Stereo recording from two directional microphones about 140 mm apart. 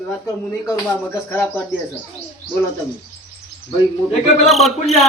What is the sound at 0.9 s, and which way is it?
Speech, 15° left (ahead or behind).